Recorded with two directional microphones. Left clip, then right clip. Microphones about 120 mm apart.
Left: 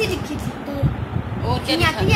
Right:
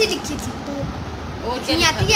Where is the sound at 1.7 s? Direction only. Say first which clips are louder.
Right 1 dB; 35° right (ahead or behind).